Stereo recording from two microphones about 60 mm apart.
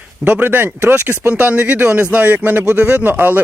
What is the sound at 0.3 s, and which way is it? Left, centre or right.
Speech, right.